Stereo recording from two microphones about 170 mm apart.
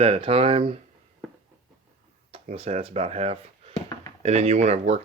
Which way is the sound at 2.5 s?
35° right (ahead or behind).